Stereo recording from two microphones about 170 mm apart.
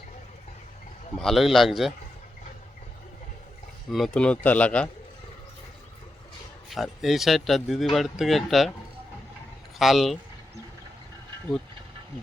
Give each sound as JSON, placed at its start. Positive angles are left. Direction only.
{"t": 1.2, "sound": "speech", "side_deg": 0}
{"t": 3.9, "sound": "speech", "side_deg": 5}
{"t": 6.7, "sound": "speech", "side_deg": 0}
{"t": 9.7, "sound": "speech", "side_deg": 0}